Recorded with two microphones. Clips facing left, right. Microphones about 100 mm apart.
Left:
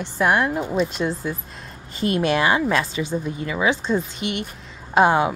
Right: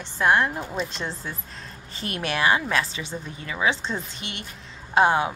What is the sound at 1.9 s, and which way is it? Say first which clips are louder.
A woman's voice: left 8 dB; 20° left (ahead or behind).